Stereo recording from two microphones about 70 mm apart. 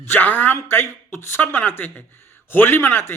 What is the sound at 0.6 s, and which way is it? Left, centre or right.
A man's voice, left.